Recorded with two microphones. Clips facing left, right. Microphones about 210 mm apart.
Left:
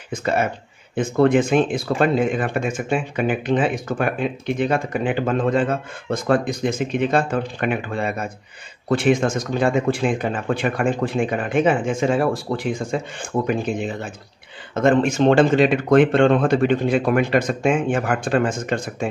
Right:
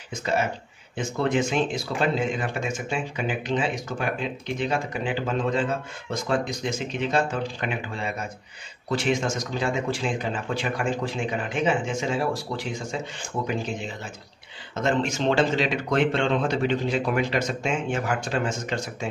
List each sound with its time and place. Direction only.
0.1 s speech: 55° left (ahead or behind)